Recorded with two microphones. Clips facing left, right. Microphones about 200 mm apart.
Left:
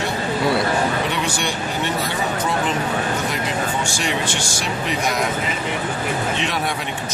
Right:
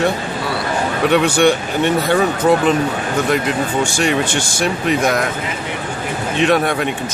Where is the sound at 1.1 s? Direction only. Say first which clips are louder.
Right 11 dB; 60° right (ahead or behind).